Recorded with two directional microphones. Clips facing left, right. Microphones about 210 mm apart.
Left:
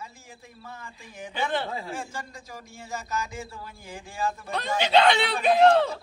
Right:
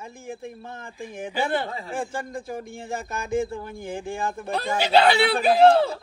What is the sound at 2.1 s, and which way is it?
Speech, 55° right (ahead or behind).